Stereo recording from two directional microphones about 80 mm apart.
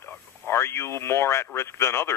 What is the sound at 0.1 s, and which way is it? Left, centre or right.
A woman's voice, left.